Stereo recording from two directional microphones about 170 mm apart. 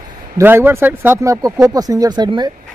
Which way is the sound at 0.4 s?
15° right (ahead or behind).